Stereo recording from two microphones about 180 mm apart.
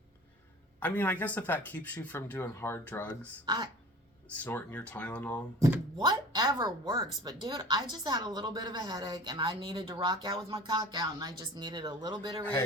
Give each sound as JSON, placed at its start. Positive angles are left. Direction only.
{"t": 0.8, "sound": "speech", "side_deg": 10}
{"t": 3.4, "sound": "speech", "side_deg": -25}
{"t": 4.3, "sound": "speech", "side_deg": 10}
{"t": 5.5, "sound": "speech", "side_deg": -20}
{"t": 12.4, "sound": "speech", "side_deg": 10}